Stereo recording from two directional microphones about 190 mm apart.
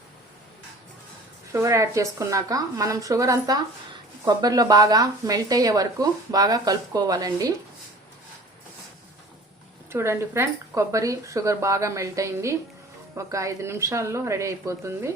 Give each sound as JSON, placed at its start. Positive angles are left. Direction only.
{"t": 1.5, "sound": "speech", "side_deg": -15}
{"t": 9.9, "sound": "speech", "side_deg": -15}